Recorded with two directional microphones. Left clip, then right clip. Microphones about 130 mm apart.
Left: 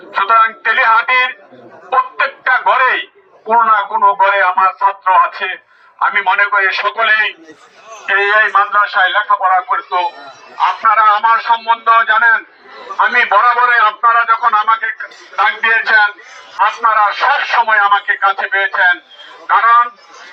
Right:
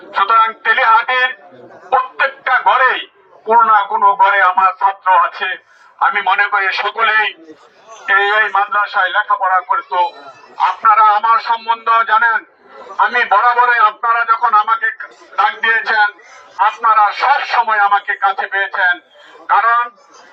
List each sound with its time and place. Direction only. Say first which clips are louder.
0.1 s a man's voice: left 1 dB; 10° right (ahead or behind)
1.9 s fowl: even; 5° right (ahead or behind)
3.4 s a man's voice: right 1 dB; 5° left (ahead or behind); by 7.3 s 15° right (ahead or behind)
8.4 s speech: left 3 dB; 40° right (ahead or behind)
9.3 s a man's voice: left 2 dB; 25° right (ahead or behind)
10.6 s speech: even; 40° right (ahead or behind)
16.8 s speech: right 1 dB; 40° right (ahead or behind)